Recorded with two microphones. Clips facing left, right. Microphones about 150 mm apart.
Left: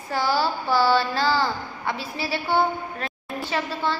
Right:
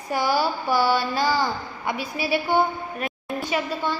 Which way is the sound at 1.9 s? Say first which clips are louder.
Right 2 dB; 30° left (ahead or behind).